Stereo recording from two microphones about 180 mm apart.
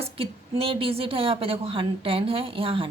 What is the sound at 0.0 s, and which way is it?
A woman's voice, 30° right (ahead or behind).